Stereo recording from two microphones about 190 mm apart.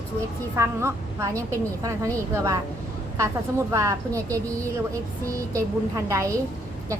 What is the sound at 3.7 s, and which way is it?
A woman's voice, 15° right (ahead or behind).